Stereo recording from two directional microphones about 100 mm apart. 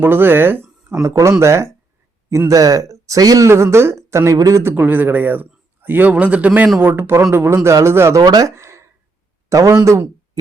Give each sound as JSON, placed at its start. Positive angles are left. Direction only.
{"t": 0.0, "sound": "speech", "side_deg": -20}
{"t": 4.7, "sound": "a man's voice", "side_deg": -20}
{"t": 8.2, "sound": "speech", "side_deg": -40}